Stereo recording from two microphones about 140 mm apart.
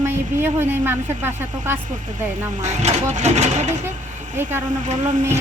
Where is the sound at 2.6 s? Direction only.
55° right (ahead or behind).